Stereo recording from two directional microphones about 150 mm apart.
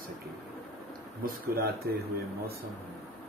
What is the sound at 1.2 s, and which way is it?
Speech, 80° right.